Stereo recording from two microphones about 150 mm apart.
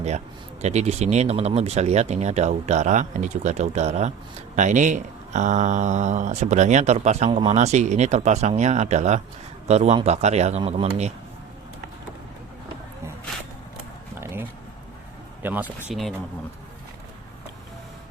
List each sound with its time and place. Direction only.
0.6 s speech: 50° right (ahead or behind)
15.4 s speech: 10° right (ahead or behind)
15.9 s speech: centre (ahead or behind)